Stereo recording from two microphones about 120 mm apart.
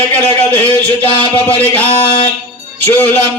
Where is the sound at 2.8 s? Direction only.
15° left (ahead or behind).